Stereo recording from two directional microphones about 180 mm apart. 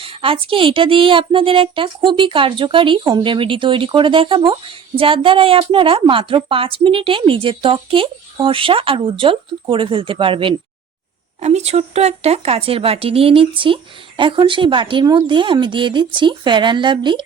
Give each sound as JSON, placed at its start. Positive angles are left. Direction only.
{"t": 0.0, "sound": "a woman's voice", "side_deg": -30}